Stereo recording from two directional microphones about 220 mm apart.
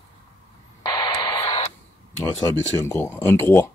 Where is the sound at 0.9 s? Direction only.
20° left (ahead or behind).